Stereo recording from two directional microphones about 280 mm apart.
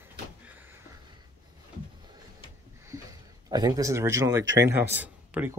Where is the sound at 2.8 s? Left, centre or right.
Centre.